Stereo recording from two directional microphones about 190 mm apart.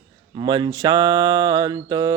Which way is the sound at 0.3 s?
25° right (ahead or behind).